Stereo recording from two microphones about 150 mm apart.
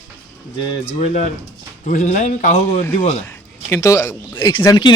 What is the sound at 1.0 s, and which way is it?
Speech, 50° left (ahead or behind).